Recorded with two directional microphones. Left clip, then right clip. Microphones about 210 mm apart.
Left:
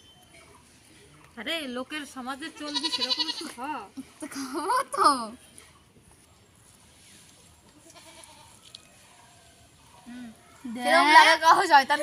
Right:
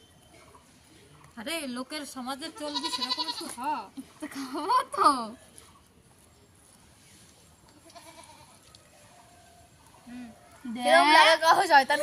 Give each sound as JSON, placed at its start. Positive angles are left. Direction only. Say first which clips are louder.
{"t": 1.4, "sound": "speech", "louder": "left 3 dB", "side_deg": -55}
{"t": 2.6, "sound": "speech", "louder": "left 3 dB", "side_deg": -35}
{"t": 3.6, "sound": "speech", "louder": "right 7 dB", "side_deg": -55}
{"t": 4.2, "sound": "speech", "louder": "left 2 dB", "side_deg": 15}
{"t": 10.8, "sound": "speech", "louder": "left 2 dB", "side_deg": 10}
{"t": 11.3, "sound": "a woman's voice", "louder": "left 2 dB", "side_deg": -10}